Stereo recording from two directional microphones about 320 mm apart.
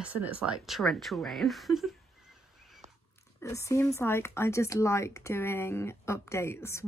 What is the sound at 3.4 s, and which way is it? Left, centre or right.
Speech, centre.